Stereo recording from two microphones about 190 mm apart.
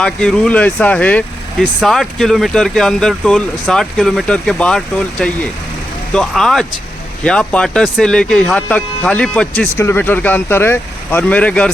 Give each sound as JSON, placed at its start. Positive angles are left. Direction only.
{"t": 0.0, "sound": "speech", "side_deg": 5}